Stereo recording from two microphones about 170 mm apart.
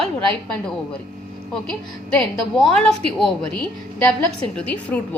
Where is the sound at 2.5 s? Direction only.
5° left (ahead or behind).